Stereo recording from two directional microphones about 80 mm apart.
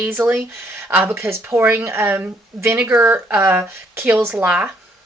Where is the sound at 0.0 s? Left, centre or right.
Right.